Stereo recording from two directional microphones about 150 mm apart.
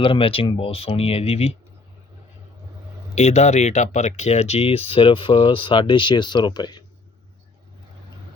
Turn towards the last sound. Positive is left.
turn(degrees=30)  # may be behind; listen again after turning